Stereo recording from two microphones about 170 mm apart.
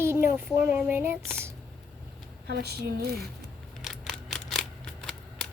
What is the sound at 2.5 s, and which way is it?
Speech, 70° right (ahead or behind).